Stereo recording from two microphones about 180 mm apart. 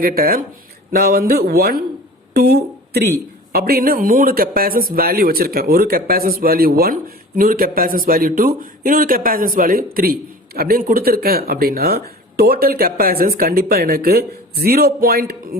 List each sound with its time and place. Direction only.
0.0 s speech: 55° right (ahead or behind)